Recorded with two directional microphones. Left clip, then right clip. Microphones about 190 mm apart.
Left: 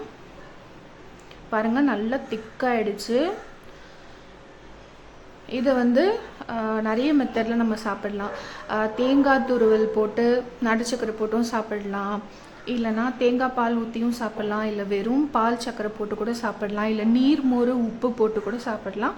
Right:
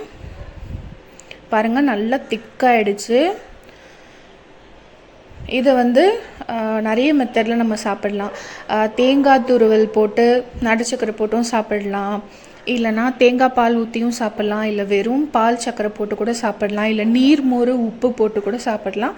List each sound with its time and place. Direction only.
1.5 s a woman's voice: 20° right (ahead or behind)
5.5 s a woman's voice: 20° right (ahead or behind)